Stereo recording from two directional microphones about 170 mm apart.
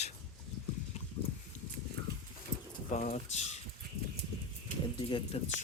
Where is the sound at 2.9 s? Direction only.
45° left (ahead or behind).